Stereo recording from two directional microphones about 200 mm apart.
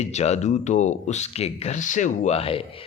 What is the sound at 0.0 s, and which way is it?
Speech, 35° left (ahead or behind).